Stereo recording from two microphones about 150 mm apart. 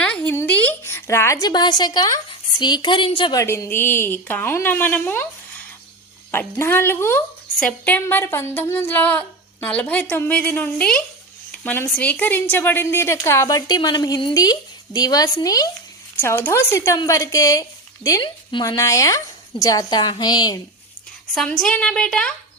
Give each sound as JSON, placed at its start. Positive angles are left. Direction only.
{"t": 0.0, "sound": "a sound", "side_deg": 10}
{"t": 3.4, "sound": "speech", "side_deg": 15}
{"t": 6.3, "sound": "speech", "side_deg": 15}
{"t": 16.1, "sound": "speech", "side_deg": 15}
{"t": 18.8, "sound": "speech", "side_deg": 20}
{"t": 21.3, "sound": "a woman's voice", "side_deg": 5}